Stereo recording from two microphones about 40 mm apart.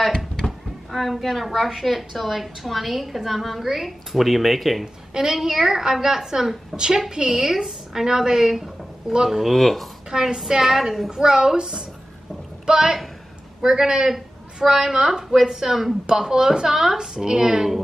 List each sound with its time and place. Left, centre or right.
0.4 s a woman's voice: centre
5.1 s a woman's voice: centre
6.7 s a woman's voice: centre
7.1 s a woman's voice: centre
9.5 s a woman's voice: centre
10.1 s a woman's voice: centre
11.1 s a woman's voice: centre